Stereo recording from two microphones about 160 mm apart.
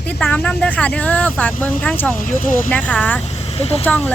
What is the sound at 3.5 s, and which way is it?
Speech, 40° left (ahead or behind).